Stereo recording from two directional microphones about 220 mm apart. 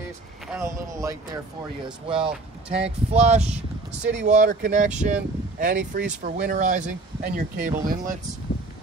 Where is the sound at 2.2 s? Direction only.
30° right (ahead or behind).